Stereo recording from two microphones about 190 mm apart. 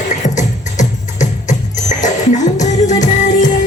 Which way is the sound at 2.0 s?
40° left (ahead or behind).